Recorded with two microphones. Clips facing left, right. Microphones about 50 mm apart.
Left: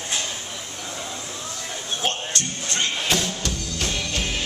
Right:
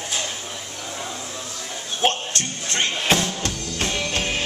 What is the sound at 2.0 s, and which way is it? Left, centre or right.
Music, right.